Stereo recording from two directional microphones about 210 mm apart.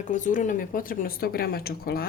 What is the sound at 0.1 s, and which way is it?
Speech, 35° left (ahead or behind).